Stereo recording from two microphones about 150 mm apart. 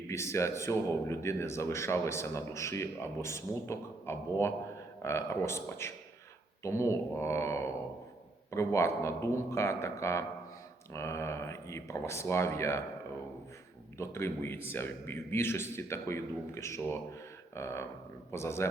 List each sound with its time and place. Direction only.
0.1 s a man's voice: 20° left (ahead or behind)
14.0 s a man's voice: 15° left (ahead or behind)
17.5 s a sound: 20° left (ahead or behind)
18.3 s a man's voice: 15° left (ahead or behind)